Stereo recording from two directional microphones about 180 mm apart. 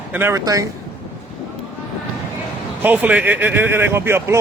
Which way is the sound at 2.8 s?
10° right (ahead or behind).